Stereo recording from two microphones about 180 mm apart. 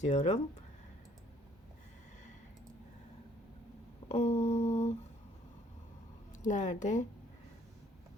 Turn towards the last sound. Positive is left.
turn(degrees=40)  # may be behind; listen again after turning